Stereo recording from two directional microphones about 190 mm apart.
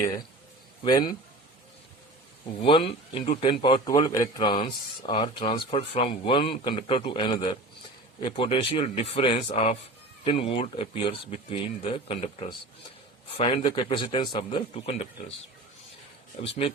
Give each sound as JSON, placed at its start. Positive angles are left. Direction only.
{"t": 0.9, "sound": "speech", "side_deg": 20}
{"t": 2.6, "sound": "speech", "side_deg": 25}
{"t": 16.4, "sound": "speech", "side_deg": 30}